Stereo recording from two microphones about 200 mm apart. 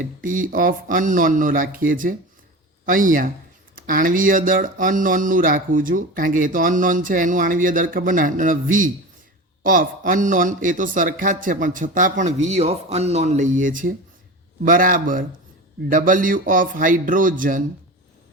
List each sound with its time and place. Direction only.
0.0 s speech: 40° right (ahead or behind)